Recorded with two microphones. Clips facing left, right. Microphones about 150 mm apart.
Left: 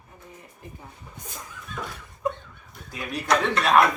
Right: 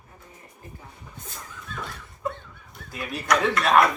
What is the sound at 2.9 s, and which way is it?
Speech, centre (ahead or behind).